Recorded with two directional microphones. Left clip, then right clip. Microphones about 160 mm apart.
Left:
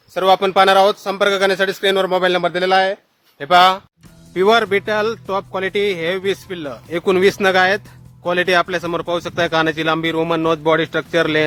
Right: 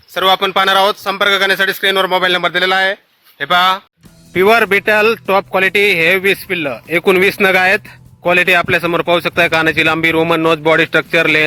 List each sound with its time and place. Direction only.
0.1 s a man's voice: 5° right (ahead or behind)
4.4 s speech: 30° right (ahead or behind)